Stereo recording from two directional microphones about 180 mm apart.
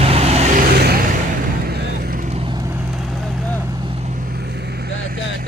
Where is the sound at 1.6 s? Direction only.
65° right (ahead or behind).